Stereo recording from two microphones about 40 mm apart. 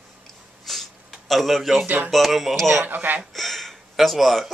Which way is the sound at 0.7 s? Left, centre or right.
Centre.